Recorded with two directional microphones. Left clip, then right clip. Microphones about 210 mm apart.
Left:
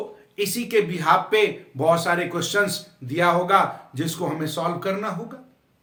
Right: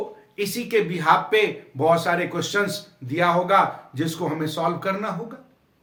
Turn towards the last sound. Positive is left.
turn(degrees=10)  # may be behind; listen again after turning